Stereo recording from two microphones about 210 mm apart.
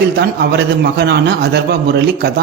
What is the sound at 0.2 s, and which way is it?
A man's voice, 50° right (ahead or behind).